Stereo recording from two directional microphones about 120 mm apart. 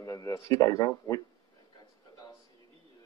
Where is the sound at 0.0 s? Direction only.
30° left (ahead or behind).